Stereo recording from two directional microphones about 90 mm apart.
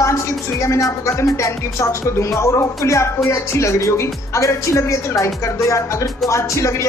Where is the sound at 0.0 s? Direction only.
35° left (ahead or behind).